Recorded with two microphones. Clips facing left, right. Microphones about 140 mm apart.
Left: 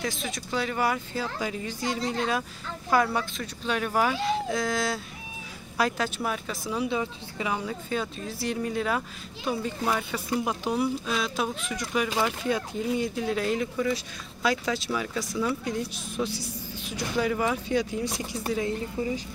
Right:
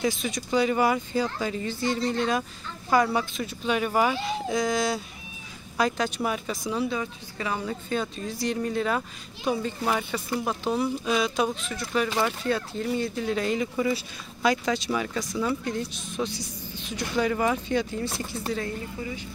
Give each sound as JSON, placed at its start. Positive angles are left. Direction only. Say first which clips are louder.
{"t": 0.0, "sound": "speech", "louder": "right 5 dB", "side_deg": 0}
{"t": 6.9, "sound": "speech", "louder": "left 1 dB", "side_deg": 20}
{"t": 10.1, "sound": "speech", "louder": "even", "side_deg": 10}
{"t": 11.1, "sound": "speech", "louder": "right 4 dB", "side_deg": 0}
{"t": 18.9, "sound": "speech", "louder": "left 5 dB", "side_deg": 30}